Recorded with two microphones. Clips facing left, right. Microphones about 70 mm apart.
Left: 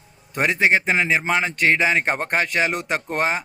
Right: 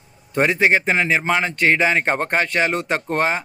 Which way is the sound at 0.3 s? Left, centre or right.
Centre.